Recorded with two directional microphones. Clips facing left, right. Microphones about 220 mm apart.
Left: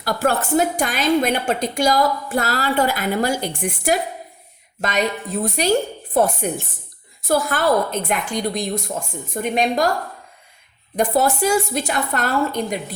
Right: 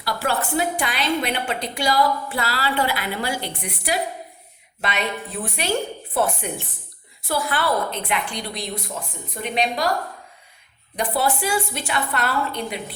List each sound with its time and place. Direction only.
0.0 s a woman's voice: 45° left (ahead or behind)
10.9 s a woman's voice: 45° left (ahead or behind)